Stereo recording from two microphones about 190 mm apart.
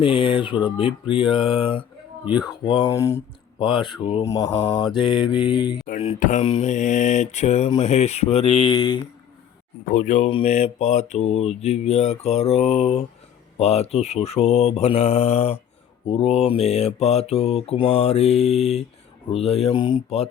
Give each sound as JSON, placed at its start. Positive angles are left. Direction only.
{"t": 0.0, "sound": "speech", "side_deg": 30}
{"t": 2.2, "sound": "speech", "side_deg": -5}
{"t": 2.6, "sound": "speech", "side_deg": 25}
{"t": 2.9, "sound": "speech", "side_deg": 15}
{"t": 5.8, "sound": "mantra", "side_deg": 35}
{"t": 9.9, "sound": "mantra", "side_deg": 40}